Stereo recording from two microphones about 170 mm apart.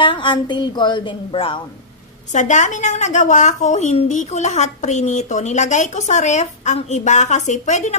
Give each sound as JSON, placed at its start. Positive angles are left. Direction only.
{"t": 0.0, "sound": "a woman's voice", "side_deg": 30}
{"t": 2.3, "sound": "a woman's voice", "side_deg": 45}